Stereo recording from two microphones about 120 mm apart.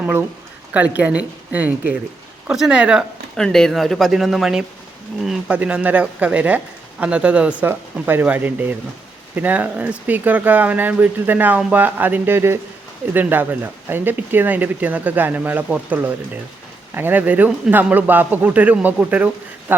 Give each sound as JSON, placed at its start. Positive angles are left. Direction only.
{"t": 0.0, "sound": "speech", "side_deg": -15}
{"t": 3.3, "sound": "speech", "side_deg": 5}